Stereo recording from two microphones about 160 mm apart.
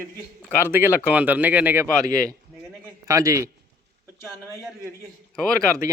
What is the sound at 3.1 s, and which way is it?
Speech, 20° right (ahead or behind).